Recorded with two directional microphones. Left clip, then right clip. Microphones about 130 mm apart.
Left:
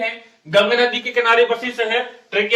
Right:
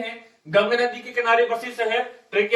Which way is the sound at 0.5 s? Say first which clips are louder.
Left 5 dB; 30° left (ahead or behind).